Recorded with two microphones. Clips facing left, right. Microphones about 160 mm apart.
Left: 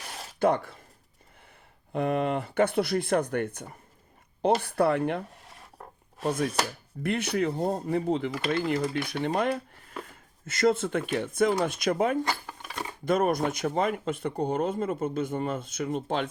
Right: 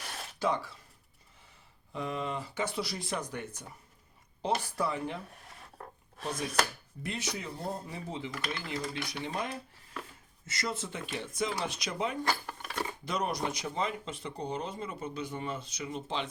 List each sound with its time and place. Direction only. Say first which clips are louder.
0.3 s speech: left 7 dB; 55° left (ahead or behind)
1.9 s speech: left 9 dB; 60° left (ahead or behind)
6.2 s speech: left 5 dB; 55° left (ahead or behind)